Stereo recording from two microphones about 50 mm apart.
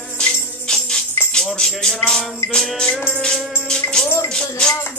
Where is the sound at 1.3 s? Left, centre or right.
Centre.